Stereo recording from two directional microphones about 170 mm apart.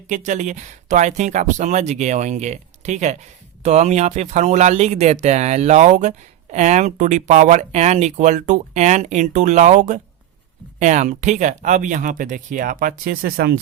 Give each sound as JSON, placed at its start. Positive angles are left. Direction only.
{"t": 0.1, "sound": "speech", "side_deg": -45}